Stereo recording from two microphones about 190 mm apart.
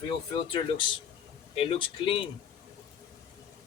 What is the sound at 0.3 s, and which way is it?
Speech, 25° left (ahead or behind).